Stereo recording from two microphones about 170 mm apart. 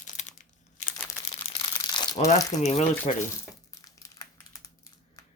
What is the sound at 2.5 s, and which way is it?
Speech, 40° left (ahead or behind).